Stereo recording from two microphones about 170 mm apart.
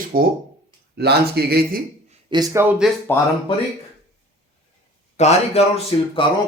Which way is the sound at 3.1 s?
15° left (ahead or behind).